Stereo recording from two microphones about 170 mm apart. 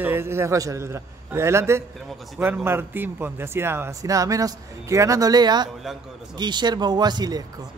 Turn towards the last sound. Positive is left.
turn(degrees=-25)  # may be behind; listen again after turning